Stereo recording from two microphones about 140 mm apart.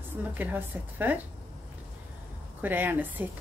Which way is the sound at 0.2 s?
10° right (ahead or behind).